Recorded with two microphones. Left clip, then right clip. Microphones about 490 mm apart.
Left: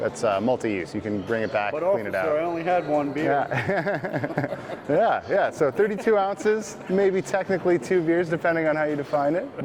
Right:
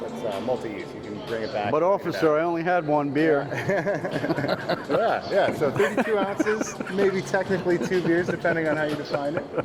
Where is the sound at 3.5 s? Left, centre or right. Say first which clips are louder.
Even; left.